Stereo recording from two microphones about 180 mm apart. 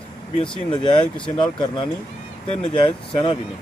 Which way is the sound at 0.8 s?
25° left (ahead or behind).